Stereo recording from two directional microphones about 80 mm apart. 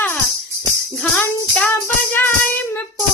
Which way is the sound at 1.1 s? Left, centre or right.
Centre.